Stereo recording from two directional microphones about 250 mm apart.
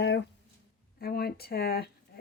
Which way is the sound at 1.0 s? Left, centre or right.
Left.